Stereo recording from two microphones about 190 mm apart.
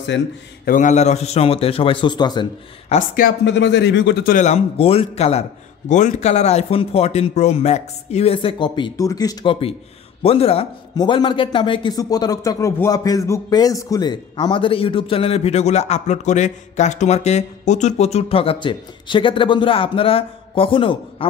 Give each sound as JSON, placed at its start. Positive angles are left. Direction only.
{"t": 0.1, "sound": "a man's voice", "side_deg": 70}
{"t": 0.7, "sound": "speech", "side_deg": 40}
{"t": 3.2, "sound": "speech", "side_deg": 60}
{"t": 4.3, "sound": "speech", "side_deg": 40}